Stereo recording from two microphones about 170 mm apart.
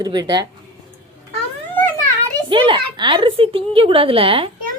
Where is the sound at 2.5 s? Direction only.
30° right (ahead or behind).